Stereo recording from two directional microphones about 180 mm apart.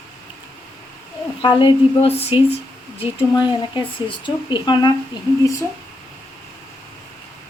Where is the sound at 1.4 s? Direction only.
30° left (ahead or behind).